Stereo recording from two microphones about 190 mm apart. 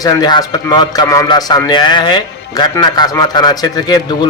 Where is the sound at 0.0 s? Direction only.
20° left (ahead or behind).